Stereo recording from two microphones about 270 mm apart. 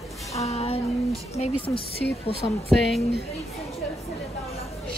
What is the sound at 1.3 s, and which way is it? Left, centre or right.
Speech, left.